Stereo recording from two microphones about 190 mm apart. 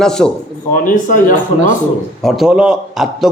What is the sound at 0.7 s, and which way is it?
Speech, 45° left (ahead or behind).